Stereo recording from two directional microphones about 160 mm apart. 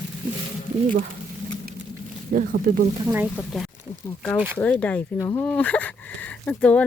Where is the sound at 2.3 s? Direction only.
65° right (ahead or behind).